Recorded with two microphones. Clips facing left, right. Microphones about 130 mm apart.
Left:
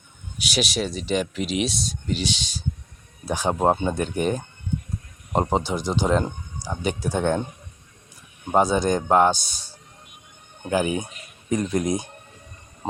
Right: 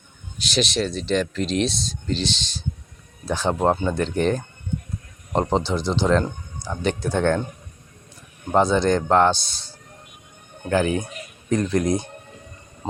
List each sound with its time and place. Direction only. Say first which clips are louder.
0.3 s speech: right 2 dB; 10° left (ahead or behind)
8.4 s speech: right 1 dB; 10° left (ahead or behind)
12.8 s a sound: even; 20° left (ahead or behind)